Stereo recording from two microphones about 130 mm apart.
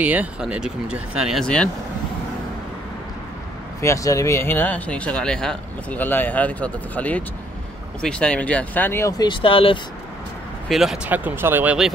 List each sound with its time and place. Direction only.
0.0 s speech: 10° right (ahead or behind)
1.4 s speech: 5° left (ahead or behind)
3.8 s speech: 25° left (ahead or behind)
9.2 s speech: 40° left (ahead or behind)
10.7 s speech: centre (ahead or behind)
11.1 s speech: 15° right (ahead or behind)